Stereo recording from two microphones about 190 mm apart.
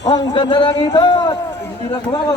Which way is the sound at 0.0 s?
20° left (ahead or behind).